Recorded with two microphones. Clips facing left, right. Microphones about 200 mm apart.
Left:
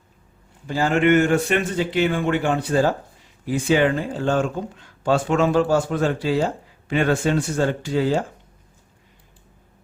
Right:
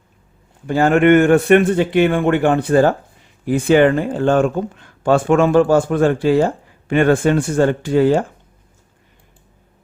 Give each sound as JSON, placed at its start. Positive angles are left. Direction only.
{"t": 0.7, "sound": "a man's voice", "side_deg": -55}